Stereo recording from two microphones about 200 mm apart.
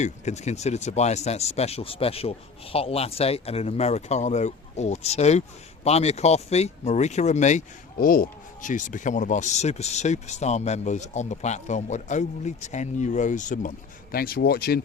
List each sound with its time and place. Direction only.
0.0 s speech: 35° left (ahead or behind); by 14.8 s 50° left (ahead or behind)